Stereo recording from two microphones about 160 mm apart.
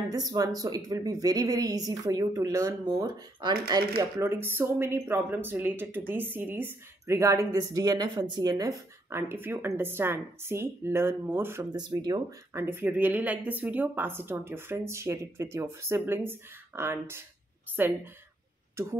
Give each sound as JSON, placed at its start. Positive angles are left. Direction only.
{"t": 0.1, "sound": "speech", "side_deg": -25}
{"t": 4.0, "sound": "speech", "side_deg": -15}
{"t": 11.7, "sound": "speech", "side_deg": -25}